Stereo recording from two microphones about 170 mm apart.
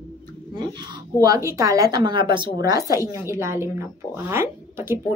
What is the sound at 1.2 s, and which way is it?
Speech, 20° right (ahead or behind).